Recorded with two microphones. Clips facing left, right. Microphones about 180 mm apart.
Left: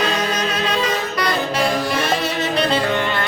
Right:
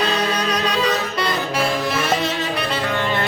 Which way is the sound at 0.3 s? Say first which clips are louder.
Right 1 dB; 35° right (ahead or behind).